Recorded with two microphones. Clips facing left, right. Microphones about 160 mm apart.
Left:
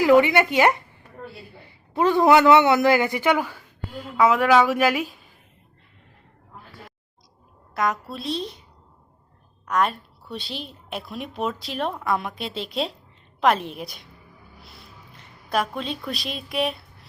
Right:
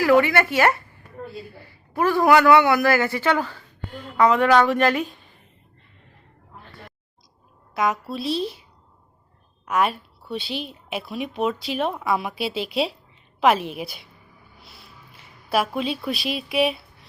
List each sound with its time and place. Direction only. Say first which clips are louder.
0.0 s a man's voice: left 1 dB; 20° left (ahead or behind)
6.7 s a sound: right 1 dB; 5° left (ahead or behind)
7.7 s a woman's voice: right 2 dB; centre (ahead or behind)
9.6 s a woman's voice: right 1 dB; 5° right (ahead or behind)
15.1 s a woman's voice: right 2 dB; 5° right (ahead or behind)